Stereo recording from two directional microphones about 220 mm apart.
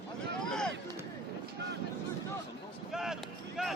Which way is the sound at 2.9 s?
Centre (ahead or behind).